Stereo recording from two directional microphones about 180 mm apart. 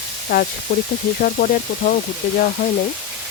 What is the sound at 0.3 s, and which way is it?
Speech, 55° left (ahead or behind).